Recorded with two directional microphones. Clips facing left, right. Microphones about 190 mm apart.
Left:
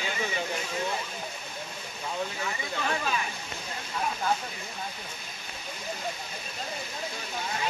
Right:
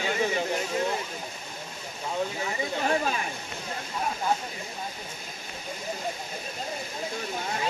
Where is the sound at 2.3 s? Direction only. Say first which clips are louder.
Right 4 dB; 30° right (ahead or behind).